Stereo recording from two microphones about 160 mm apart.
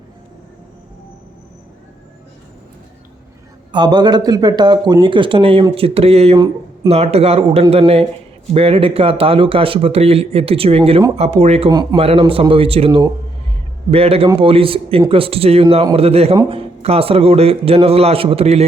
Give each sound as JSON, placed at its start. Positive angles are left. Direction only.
{"t": 3.7, "sound": "speech", "side_deg": -25}
{"t": 11.7, "sound": "speech", "side_deg": -25}